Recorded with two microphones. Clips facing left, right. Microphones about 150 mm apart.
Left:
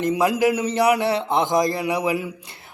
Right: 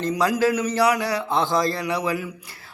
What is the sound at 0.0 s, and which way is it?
Speech, 20° left (ahead or behind).